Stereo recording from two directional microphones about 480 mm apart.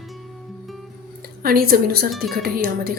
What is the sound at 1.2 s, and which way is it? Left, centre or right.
A woman's voice, centre.